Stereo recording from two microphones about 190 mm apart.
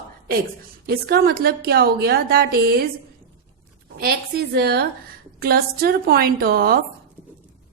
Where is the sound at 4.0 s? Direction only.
55° right (ahead or behind).